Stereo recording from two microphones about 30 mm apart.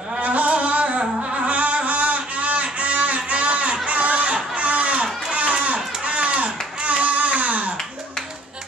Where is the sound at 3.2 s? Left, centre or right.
Right.